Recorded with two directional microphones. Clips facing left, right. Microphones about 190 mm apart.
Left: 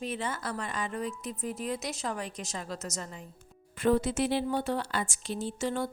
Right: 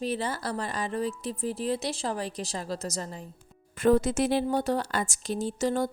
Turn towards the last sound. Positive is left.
turn(degrees=-40)  # may be behind; listen again after turning